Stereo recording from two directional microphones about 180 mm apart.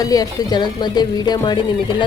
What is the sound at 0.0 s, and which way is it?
Speech, 20° left (ahead or behind).